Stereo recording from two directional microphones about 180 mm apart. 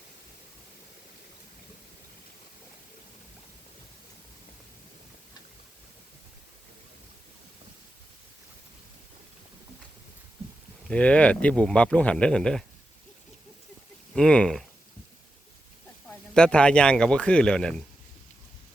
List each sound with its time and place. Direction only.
10.8 s speech: 5° left (ahead or behind)
14.1 s speech: 5° left (ahead or behind)
16.0 s speech: 5° left (ahead or behind)